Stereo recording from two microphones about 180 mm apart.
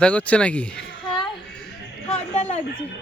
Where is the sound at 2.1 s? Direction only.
35° left (ahead or behind).